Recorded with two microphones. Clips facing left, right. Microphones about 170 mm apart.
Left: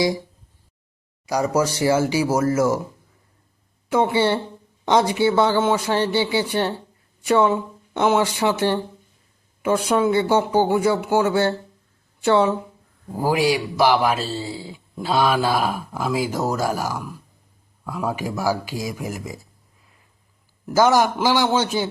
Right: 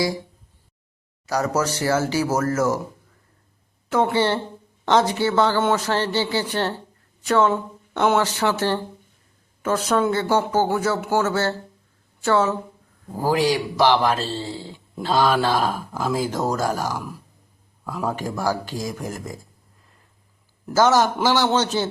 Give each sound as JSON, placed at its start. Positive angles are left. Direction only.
{"t": 1.3, "sound": "speech", "side_deg": 10}
{"t": 4.1, "sound": "speech", "side_deg": 10}
{"t": 20.7, "sound": "speech", "side_deg": 10}